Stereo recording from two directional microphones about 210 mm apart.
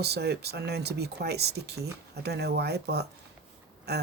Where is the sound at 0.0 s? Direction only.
50° right (ahead or behind).